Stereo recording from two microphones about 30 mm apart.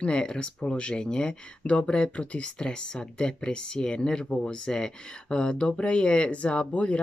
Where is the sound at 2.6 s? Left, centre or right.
Left.